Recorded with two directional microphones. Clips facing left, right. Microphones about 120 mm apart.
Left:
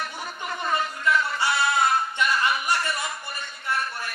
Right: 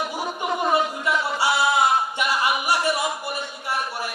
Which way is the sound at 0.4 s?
20° right (ahead or behind).